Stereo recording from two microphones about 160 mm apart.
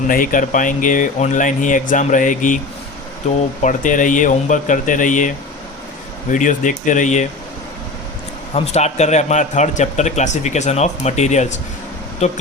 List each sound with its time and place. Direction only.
0.1 s speech: 60° left (ahead or behind)
6.3 s speech: 55° left (ahead or behind)
8.5 s speech: 40° left (ahead or behind)